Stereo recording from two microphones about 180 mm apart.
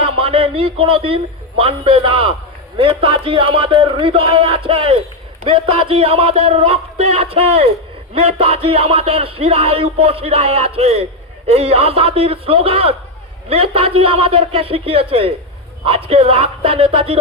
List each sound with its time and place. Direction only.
0.0 s a man's voice: 30° right (ahead or behind)